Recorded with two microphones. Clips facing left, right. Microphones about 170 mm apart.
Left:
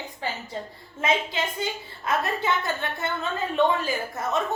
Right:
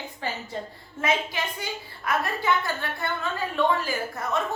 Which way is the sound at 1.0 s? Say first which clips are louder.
Left 1 dB; 25° left (ahead or behind).